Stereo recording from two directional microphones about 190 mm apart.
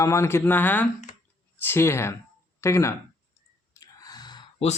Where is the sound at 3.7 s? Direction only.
20° left (ahead or behind).